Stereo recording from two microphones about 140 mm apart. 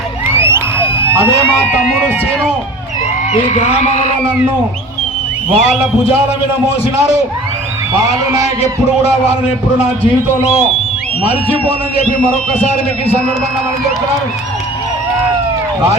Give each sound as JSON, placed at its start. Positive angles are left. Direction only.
{"t": 0.3, "sound": "a sound", "side_deg": -15}
{"t": 1.7, "sound": "speech", "side_deg": -10}
{"t": 3.3, "sound": "speech", "side_deg": 45}
{"t": 5.5, "sound": "a man's voice", "side_deg": -5}
{"t": 7.9, "sound": "a man's voice", "side_deg": -25}
{"t": 10.0, "sound": "speech", "side_deg": 45}